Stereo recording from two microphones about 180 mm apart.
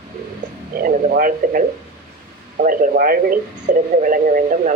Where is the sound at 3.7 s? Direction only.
70° right (ahead or behind).